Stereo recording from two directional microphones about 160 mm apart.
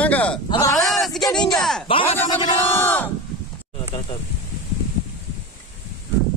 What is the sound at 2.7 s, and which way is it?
Speech, 15° left (ahead or behind).